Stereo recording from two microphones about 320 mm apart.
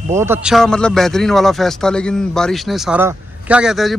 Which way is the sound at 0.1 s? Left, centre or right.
Centre.